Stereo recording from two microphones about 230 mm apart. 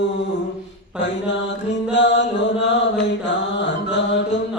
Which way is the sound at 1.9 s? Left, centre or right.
Left.